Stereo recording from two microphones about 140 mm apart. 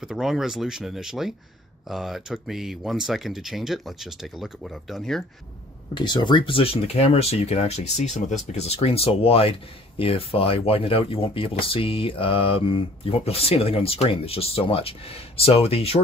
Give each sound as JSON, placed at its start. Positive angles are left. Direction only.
{"t": 0.0, "sound": "speech", "side_deg": 0}
{"t": 5.9, "sound": "speech", "side_deg": 35}